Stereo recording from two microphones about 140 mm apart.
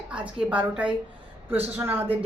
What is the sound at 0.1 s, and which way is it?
A woman's voice, 10° right (ahead or behind).